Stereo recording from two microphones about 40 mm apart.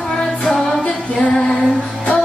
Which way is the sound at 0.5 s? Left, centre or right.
Centre.